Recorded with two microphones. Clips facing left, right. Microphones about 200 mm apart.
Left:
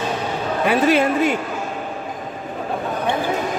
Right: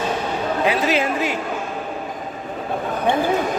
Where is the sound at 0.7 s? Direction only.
55° left (ahead or behind).